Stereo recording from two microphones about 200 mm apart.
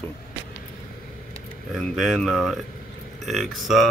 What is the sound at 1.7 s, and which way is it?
Speech, centre (ahead or behind).